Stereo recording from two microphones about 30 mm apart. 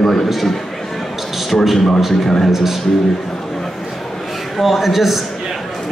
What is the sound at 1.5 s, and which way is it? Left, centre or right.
Speech, centre.